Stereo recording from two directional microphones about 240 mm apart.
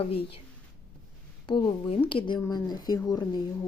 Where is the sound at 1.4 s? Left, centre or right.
Left.